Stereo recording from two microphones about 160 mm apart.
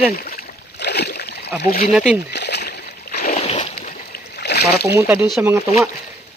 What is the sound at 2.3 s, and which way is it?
Splash, 90° left.